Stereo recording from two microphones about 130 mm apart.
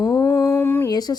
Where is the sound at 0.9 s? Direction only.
30° left (ahead or behind).